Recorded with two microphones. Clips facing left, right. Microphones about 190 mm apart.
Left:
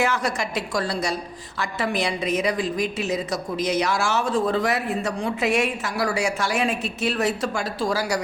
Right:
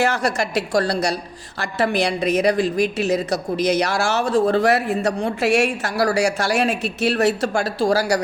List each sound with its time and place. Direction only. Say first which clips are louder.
0.0 s a woman's voice: right 3 dB; 75° right (ahead or behind)